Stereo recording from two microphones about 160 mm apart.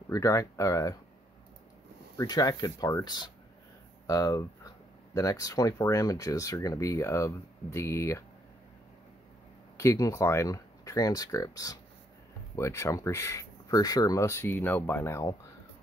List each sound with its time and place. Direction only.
0.1 s speech: 20° left (ahead or behind)
2.1 s speech: 25° left (ahead or behind)
9.8 s speech: 20° left (ahead or behind)